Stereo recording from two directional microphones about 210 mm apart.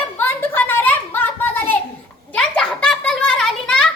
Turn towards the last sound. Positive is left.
turn(degrees=5)  # may be behind; listen again after turning